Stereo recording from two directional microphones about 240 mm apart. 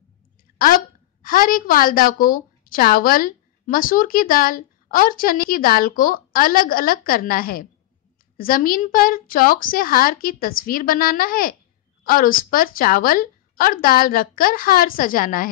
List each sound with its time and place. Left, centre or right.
1.2 s a woman's voice: left